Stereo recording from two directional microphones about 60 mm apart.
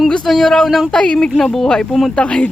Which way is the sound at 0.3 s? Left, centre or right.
Centre.